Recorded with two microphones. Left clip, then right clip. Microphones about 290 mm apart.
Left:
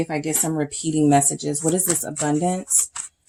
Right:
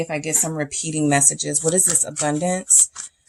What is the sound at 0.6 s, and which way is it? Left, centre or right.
Speech, right.